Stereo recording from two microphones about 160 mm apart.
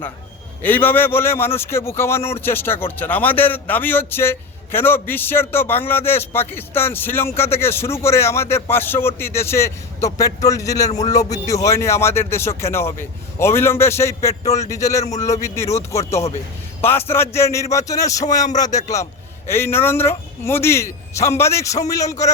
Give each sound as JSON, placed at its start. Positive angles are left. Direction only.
{"t": 0.6, "sound": "speech", "side_deg": 10}